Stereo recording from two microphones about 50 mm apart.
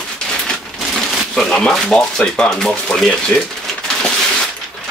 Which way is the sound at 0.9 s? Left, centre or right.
Centre.